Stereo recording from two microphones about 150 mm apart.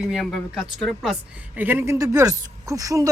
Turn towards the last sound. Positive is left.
turn(degrees=-20)  # may be behind; listen again after turning